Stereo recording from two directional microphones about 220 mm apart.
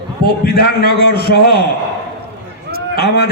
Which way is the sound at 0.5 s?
45° left (ahead or behind).